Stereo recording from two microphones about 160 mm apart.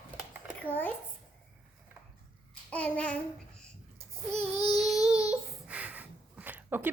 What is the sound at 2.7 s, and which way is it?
Child singing, 10° left (ahead or behind).